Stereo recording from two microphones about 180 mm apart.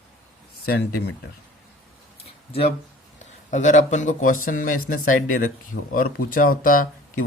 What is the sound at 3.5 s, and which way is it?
Speech, 45° left (ahead or behind).